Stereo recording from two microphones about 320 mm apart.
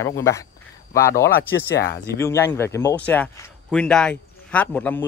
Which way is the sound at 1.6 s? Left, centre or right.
Left.